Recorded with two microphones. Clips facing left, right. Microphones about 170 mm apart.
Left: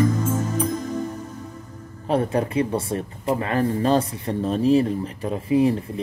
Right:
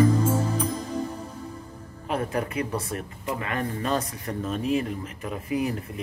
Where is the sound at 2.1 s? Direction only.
30° left (ahead or behind).